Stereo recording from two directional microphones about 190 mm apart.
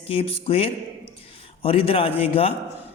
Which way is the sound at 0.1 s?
30° left (ahead or behind).